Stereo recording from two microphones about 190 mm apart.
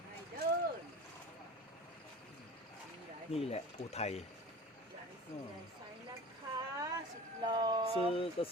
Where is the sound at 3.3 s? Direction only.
35° left (ahead or behind).